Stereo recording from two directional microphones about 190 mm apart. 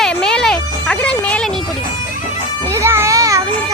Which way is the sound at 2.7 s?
15° right (ahead or behind).